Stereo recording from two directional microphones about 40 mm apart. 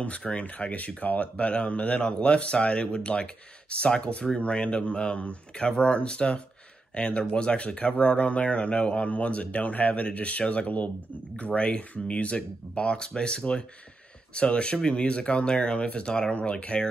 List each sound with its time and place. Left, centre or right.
0.2 s speech: left
0.7 s speech: left